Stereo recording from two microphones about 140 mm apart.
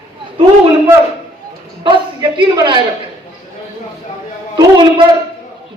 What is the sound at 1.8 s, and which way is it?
Speech, 35° right (ahead or behind).